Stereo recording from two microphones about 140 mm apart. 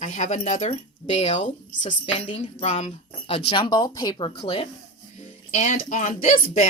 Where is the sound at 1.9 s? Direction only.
40° left (ahead or behind).